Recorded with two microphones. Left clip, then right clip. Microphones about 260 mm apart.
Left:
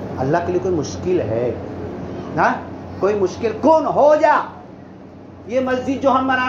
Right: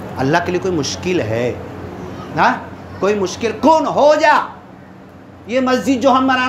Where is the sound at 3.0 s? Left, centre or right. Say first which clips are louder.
Right 1 dB; right.